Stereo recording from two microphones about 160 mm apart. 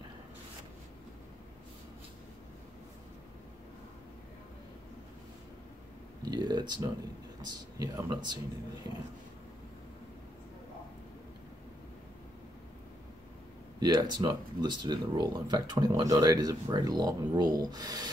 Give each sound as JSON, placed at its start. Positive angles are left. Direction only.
{"t": 6.2, "sound": "speech", "side_deg": -25}
{"t": 13.7, "sound": "speech", "side_deg": -25}